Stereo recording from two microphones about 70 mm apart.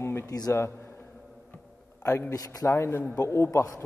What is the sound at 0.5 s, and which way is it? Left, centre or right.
Speech, left.